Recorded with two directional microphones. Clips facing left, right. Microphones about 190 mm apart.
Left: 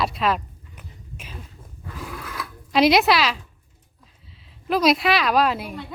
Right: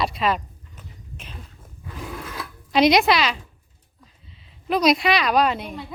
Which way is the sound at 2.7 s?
Centre (ahead or behind).